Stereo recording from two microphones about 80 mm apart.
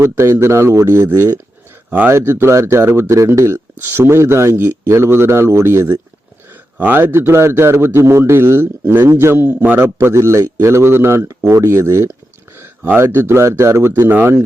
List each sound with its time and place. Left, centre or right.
0.0 s speech: right
12.5 s a sound: right
13.0 s speech: right